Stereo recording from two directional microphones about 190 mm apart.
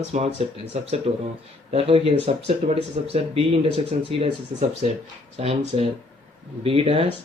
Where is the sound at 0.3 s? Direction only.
35° right (ahead or behind).